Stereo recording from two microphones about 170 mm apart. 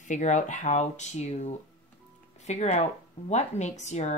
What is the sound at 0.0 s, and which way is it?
Speech, 45° left (ahead or behind).